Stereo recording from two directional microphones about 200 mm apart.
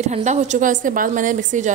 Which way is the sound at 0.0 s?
35° right (ahead or behind).